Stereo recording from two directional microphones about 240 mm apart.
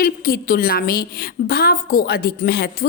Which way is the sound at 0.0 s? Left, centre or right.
Left.